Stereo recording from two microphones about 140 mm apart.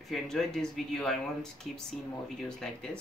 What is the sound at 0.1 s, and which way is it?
Speech, 5° left (ahead or behind).